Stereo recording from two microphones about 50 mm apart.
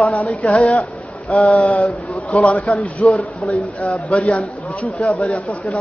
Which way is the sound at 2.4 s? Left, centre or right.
Left.